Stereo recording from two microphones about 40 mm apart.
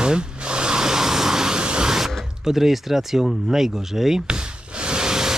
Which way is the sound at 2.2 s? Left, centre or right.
Centre.